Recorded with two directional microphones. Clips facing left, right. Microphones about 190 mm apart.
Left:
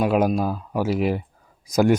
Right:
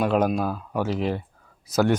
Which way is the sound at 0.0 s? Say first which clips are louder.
Left 2 dB; 10° left (ahead or behind).